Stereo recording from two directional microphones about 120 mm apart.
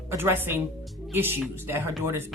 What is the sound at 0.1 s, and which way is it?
Speech, 20° right (ahead or behind).